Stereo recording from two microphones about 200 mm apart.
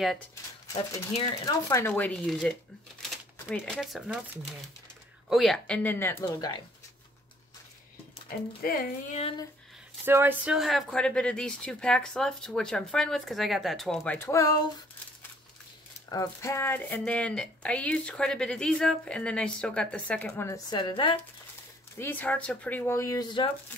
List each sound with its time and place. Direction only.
1.4 s speech: 15° left (ahead or behind)
8.6 s speech: 35° left (ahead or behind)
10.0 s speech: 10° right (ahead or behind); by 14.7 s 15° left (ahead or behind)
16.1 s speech: 15° left (ahead or behind)
21.9 s speech: 10° left (ahead or behind)